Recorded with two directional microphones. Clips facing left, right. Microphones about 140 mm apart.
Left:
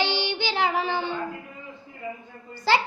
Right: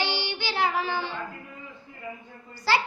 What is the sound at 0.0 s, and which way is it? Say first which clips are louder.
Child singing: left 4 dB; 20° left (ahead or behind).